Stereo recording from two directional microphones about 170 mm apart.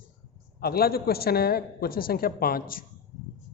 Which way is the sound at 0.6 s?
65° left (ahead or behind).